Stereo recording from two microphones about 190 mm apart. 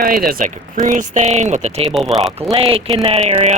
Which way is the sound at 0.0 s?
50° right (ahead or behind).